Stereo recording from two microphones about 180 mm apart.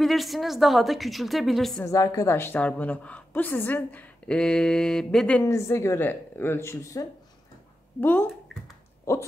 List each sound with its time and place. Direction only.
0.0 s a woman's voice: centre (ahead or behind)
1.9 s a woman's voice: 15° left (ahead or behind)
5.4 s a woman's voice: 15° left (ahead or behind)